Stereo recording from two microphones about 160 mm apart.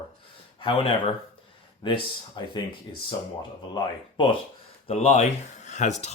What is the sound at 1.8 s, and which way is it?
Speech, 30° left (ahead or behind).